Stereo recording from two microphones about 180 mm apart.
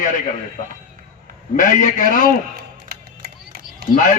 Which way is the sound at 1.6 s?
45° left (ahead or behind).